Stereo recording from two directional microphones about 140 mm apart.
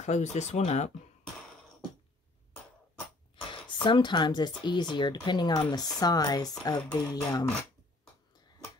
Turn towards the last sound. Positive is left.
turn(degrees=25)  # may be behind; listen again after turning